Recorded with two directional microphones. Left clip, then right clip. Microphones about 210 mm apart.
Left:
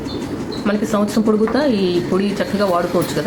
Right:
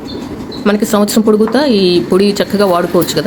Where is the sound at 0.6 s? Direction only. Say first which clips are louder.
Right 7 dB; 50° right (ahead or behind).